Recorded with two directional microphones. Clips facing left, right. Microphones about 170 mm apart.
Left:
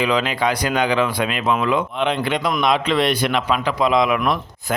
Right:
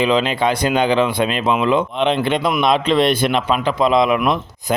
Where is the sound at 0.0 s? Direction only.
25° right (ahead or behind).